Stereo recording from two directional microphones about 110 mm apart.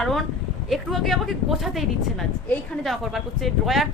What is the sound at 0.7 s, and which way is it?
Speech, centre (ahead or behind).